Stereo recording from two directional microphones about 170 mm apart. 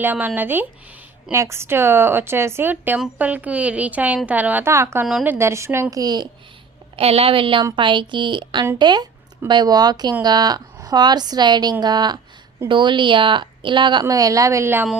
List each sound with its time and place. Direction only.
0.0 s a woman's voice: 10° right (ahead or behind)
6.9 s speech: 35° right (ahead or behind); by 14.8 s 15° right (ahead or behind)